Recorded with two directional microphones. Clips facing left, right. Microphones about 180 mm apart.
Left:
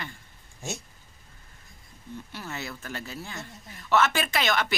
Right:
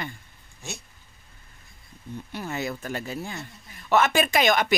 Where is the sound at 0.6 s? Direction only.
45° left (ahead or behind).